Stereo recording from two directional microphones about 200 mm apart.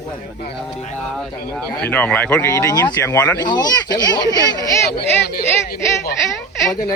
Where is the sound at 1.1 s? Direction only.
5° left (ahead or behind).